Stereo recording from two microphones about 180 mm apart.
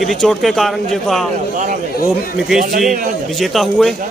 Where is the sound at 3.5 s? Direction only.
Centre (ahead or behind).